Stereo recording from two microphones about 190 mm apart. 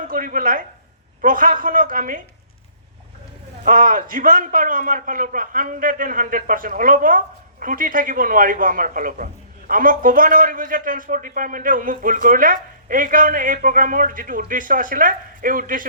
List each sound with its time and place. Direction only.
0.0 s a man's voice: 45° right (ahead or behind)
3.6 s a man's voice: 45° right (ahead or behind)